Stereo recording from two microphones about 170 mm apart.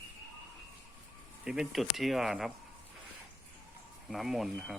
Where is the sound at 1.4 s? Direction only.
5° right (ahead or behind).